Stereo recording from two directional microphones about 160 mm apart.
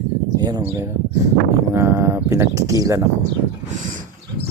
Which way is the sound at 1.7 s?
15° right (ahead or behind).